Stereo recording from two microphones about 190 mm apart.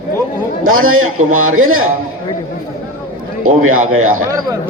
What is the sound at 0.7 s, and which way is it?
A man's voice, 90° right.